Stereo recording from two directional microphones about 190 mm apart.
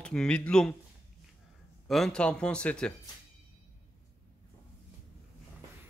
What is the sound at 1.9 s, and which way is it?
Speech, centre (ahead or behind).